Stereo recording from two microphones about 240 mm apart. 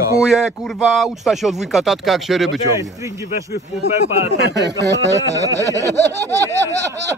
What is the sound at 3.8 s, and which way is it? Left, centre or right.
Speech, right.